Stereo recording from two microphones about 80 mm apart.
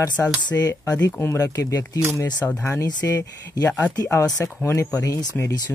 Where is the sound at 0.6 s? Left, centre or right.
Left.